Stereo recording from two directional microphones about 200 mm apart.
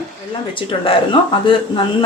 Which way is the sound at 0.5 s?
25° left (ahead or behind).